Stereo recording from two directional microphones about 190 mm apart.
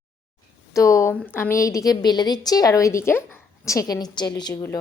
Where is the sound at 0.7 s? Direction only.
15° left (ahead or behind).